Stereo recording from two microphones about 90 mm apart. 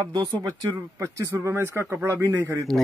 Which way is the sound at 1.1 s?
30° right (ahead or behind).